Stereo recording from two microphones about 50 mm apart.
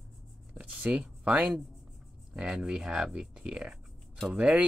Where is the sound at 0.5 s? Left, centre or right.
Right.